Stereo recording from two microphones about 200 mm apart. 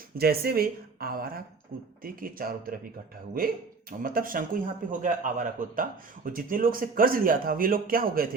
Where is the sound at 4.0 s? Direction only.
45° right (ahead or behind).